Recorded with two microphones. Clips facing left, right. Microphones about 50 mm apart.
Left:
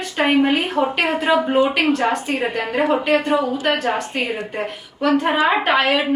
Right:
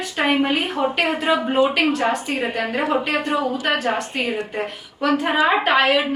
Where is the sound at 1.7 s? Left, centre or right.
Centre.